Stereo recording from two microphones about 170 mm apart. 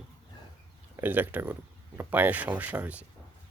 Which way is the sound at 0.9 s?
10° right (ahead or behind).